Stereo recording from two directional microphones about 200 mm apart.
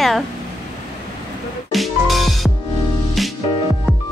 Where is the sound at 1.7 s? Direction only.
Centre (ahead or behind).